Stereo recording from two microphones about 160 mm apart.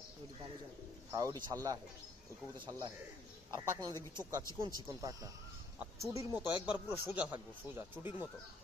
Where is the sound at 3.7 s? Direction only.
25° right (ahead or behind).